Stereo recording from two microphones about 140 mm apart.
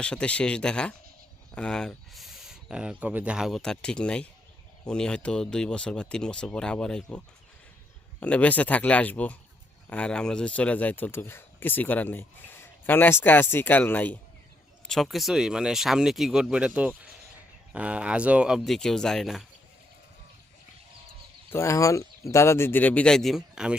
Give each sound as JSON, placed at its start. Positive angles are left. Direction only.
{"t": 0.0, "sound": "speech", "side_deg": 5}
{"t": 8.2, "sound": "speech", "side_deg": 10}
{"t": 21.5, "sound": "speech", "side_deg": 20}